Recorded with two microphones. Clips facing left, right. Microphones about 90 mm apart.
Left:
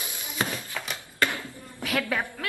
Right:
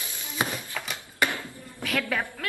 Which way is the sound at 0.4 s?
15° right (ahead or behind).